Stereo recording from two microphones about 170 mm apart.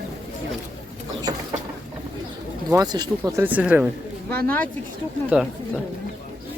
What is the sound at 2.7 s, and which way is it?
Speech, 20° right (ahead or behind).